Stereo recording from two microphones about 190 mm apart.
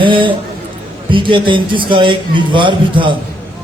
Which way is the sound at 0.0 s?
25° right (ahead or behind).